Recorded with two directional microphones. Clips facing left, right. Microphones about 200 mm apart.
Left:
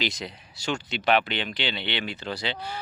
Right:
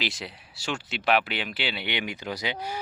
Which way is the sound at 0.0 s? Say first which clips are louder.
Left 2 dB; centre (ahead or behind).